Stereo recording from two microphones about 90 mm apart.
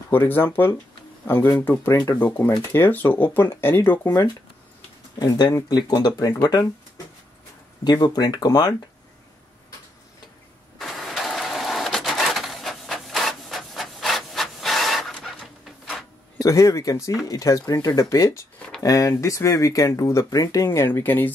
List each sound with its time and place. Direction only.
0.1 s speech: 25° left (ahead or behind)
2.1 s speech: 20° left (ahead or behind)
5.2 s speech: 45° left (ahead or behind)
7.8 s speech: 50° left (ahead or behind)
10.8 s printer: 5° left (ahead or behind)
16.4 s speech: 35° left (ahead or behind); by 21.3 s 20° left (ahead or behind)